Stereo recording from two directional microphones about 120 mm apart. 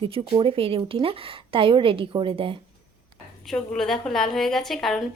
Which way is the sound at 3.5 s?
5° left (ahead or behind).